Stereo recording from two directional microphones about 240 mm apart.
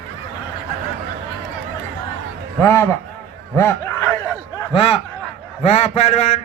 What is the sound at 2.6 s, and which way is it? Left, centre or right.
Speech, centre.